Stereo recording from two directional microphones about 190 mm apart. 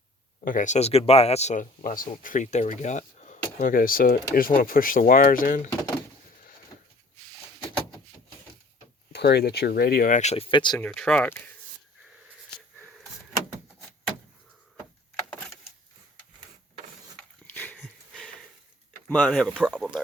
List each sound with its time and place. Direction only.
0.4 s speech: 45° left (ahead or behind)
9.1 s speech: 55° left (ahead or behind); by 10.8 s 25° left (ahead or behind)
10.8 s speech: 5° left (ahead or behind)
17.4 s a sound: 10° left (ahead or behind)
19.0 s speech: 5° left (ahead or behind)